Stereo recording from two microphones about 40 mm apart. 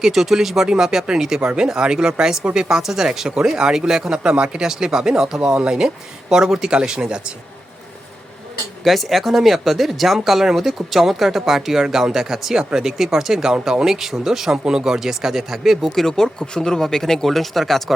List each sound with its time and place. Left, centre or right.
0.0 s speech: centre; by 4.7 s right
4.7 s speech: centre
5.5 s speech: right
6.3 s speech: centre
8.8 s speech: centre
16.0 s speech: centre